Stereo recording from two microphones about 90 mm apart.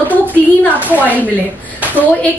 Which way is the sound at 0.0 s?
20° left (ahead or behind).